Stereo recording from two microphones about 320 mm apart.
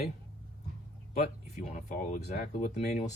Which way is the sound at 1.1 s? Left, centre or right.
Left.